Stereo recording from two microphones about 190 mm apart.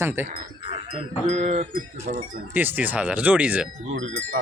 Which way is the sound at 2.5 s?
10° right (ahead or behind).